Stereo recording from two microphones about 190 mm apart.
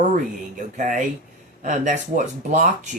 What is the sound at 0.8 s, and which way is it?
Speech, 40° right (ahead or behind).